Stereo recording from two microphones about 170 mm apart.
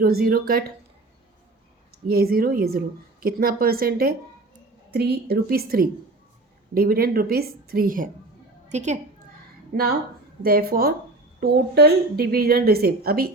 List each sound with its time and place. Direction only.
0.0 s a woman's voice: 65° right (ahead or behind)
2.0 s a woman's voice: 60° right (ahead or behind)
8.7 s a woman's voice: 45° right (ahead or behind)
9.7 s a woman's voice: 60° right (ahead or behind)